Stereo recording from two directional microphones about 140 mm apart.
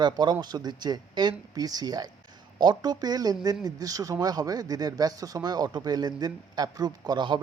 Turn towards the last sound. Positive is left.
turn(degrees=-30)  # may be behind; listen again after turning